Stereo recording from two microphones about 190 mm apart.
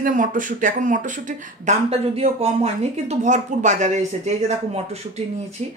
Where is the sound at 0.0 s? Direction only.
45° right (ahead or behind).